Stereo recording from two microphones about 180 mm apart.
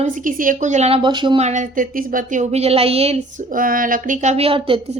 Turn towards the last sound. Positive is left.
turn(degrees=-30)  # may be behind; listen again after turning